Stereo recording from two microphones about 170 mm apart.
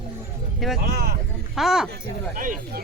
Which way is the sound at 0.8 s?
65° right (ahead or behind).